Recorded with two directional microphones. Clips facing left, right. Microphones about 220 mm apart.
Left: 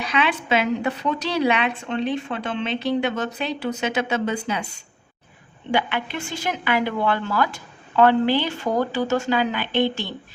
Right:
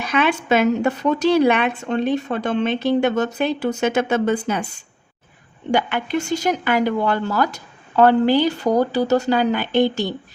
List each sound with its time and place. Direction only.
0.0 s speech: 50° right (ahead or behind)
5.7 s speech: 45° right (ahead or behind)